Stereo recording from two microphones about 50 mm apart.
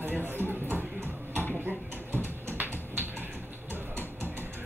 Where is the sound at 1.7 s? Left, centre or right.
Right.